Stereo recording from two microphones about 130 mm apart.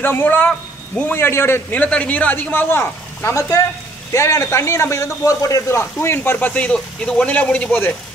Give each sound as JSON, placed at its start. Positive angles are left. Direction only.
{"t": 0.0, "sound": "a man's voice", "side_deg": 15}